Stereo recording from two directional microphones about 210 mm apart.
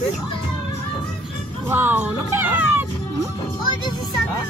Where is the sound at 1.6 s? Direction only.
10° right (ahead or behind).